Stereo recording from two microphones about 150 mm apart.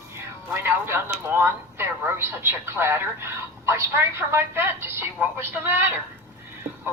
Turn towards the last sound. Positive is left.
turn(degrees=-15)  # may be behind; listen again after turning